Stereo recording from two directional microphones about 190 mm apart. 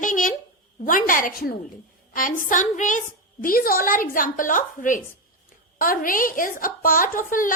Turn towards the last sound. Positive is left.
turn(degrees=45)  # may be behind; listen again after turning